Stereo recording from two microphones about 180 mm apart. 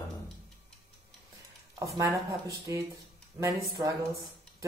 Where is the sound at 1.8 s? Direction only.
15° right (ahead or behind).